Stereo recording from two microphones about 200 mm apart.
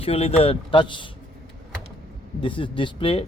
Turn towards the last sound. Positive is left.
turn(degrees=25)  # may be behind; listen again after turning